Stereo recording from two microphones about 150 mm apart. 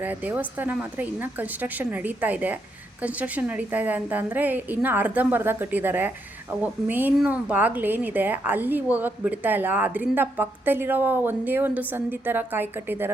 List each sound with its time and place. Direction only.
0.0 s a woman's voice: 10° right (ahead or behind)